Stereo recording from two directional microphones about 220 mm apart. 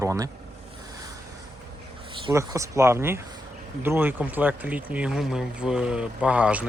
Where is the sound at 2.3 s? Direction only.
15° right (ahead or behind).